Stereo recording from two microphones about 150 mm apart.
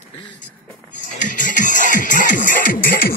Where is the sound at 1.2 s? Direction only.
60° left (ahead or behind); by 3.1 s 80° left.